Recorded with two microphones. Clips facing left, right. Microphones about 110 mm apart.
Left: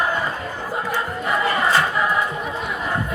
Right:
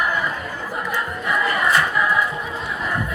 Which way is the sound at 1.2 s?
25° left (ahead or behind).